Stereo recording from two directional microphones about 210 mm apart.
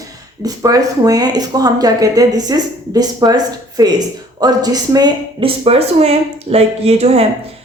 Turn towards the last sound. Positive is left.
turn(degrees=-30)  # may be behind; listen again after turning